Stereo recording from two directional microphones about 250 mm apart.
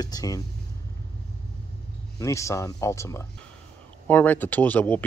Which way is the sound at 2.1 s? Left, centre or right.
Centre.